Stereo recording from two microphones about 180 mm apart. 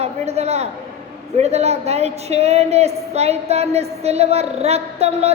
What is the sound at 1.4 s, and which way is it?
Speech, 35° right (ahead or behind).